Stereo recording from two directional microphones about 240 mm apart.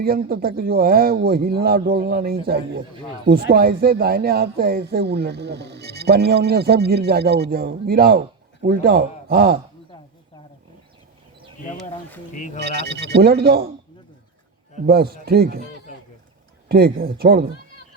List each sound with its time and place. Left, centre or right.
0.0 s speech: right
12.5 s speech: right
14.8 s speech: right
16.6 s speech: right